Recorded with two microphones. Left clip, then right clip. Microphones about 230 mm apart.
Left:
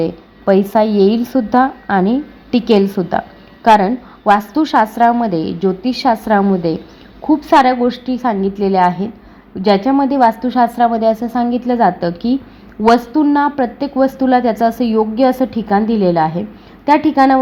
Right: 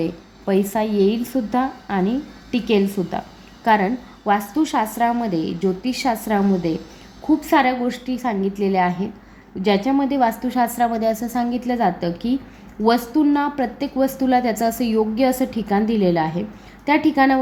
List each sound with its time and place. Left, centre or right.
0.0 s a woman's voice: centre